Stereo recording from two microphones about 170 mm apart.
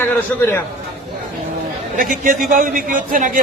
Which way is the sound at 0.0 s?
10° left (ahead or behind).